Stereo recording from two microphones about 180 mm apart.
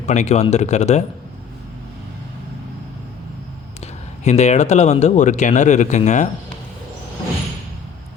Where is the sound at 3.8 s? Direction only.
40° left (ahead or behind).